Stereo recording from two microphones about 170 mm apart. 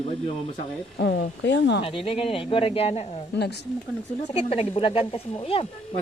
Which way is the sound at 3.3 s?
80° left.